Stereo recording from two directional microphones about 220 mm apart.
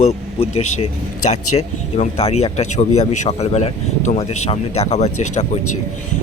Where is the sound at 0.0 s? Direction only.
30° left (ahead or behind).